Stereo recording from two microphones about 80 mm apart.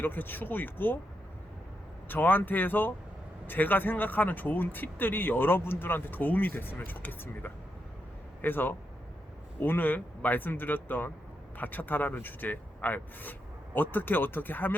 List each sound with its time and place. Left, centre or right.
0.0 s speech: left
2.0 s speech: left